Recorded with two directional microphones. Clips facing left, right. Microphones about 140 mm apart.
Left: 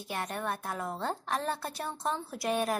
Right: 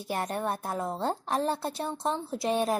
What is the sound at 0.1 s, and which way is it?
A woman's voice, 35° right (ahead or behind).